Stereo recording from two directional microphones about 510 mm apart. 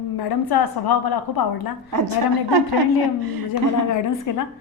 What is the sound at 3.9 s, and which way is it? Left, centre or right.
Speech, left.